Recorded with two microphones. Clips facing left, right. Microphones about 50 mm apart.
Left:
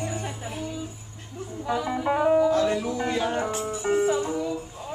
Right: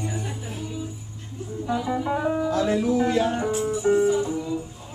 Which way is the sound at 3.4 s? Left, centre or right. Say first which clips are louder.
Right 3 dB; left.